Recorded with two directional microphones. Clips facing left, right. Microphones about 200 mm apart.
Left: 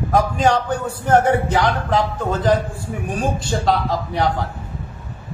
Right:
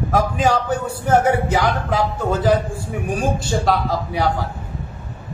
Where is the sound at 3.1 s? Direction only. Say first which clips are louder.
Right 1 dB; 10° right (ahead or behind).